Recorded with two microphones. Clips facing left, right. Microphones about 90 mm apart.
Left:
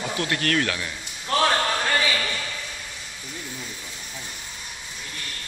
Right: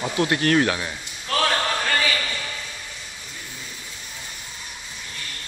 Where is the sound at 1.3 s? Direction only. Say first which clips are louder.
Left 1 dB; 15° left (ahead or behind).